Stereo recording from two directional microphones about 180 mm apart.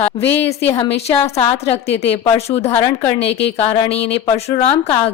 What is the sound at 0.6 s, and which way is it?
Speech, 25° left (ahead or behind).